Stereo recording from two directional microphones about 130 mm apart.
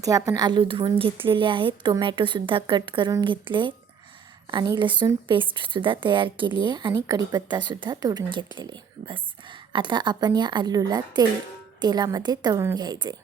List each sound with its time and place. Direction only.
0.0 s a woman's voice: 25° right (ahead or behind)